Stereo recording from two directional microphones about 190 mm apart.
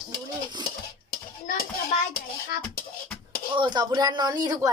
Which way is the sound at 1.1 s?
50° left (ahead or behind).